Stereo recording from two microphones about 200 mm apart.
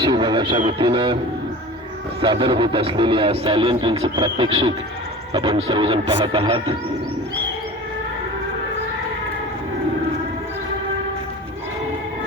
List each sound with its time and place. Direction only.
0.0 s radio: 20° right (ahead or behind)
0.8 s speech: 25° right (ahead or behind)
2.2 s speech: 25° right (ahead or behind)